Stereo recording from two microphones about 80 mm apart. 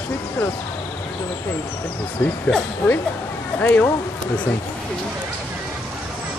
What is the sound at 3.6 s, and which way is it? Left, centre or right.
Speech, left.